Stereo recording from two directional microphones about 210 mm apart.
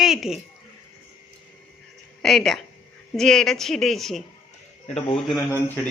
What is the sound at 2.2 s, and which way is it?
A woman's voice, centre (ahead or behind).